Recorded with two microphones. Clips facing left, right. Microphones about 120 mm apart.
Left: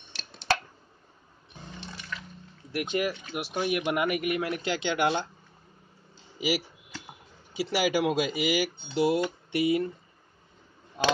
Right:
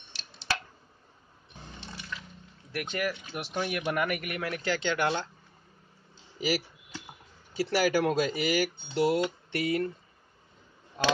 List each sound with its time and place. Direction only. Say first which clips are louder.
0.1 s a sound: left 4 dB; 50° left (ahead or behind)
2.7 s a man's voice: left 3 dB; 20° left (ahead or behind)
7.5 s a man's voice: even; 15° left (ahead or behind)